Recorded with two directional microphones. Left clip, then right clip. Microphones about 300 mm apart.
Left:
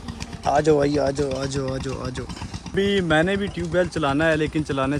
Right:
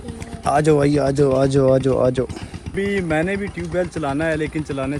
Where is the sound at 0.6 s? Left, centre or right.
Centre.